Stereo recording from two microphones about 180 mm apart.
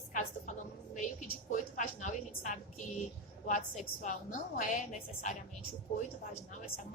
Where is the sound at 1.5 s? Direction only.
45° left (ahead or behind).